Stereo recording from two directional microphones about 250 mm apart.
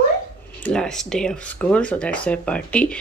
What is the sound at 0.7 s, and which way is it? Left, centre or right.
Speech, centre.